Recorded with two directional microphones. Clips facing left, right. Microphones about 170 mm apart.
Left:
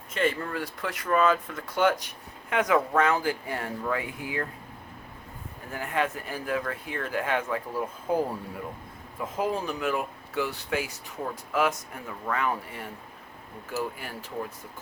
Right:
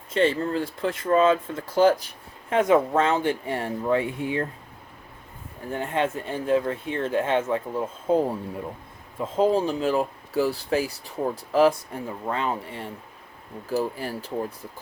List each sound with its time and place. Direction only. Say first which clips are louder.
0.1 s speech: right 6 dB; 30° right (ahead or behind)
5.7 s speech: right 3 dB; 25° right (ahead or behind)